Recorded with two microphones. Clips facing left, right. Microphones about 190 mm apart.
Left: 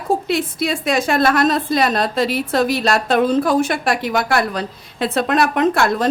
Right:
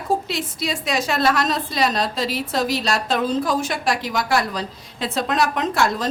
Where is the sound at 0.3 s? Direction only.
55° left (ahead or behind).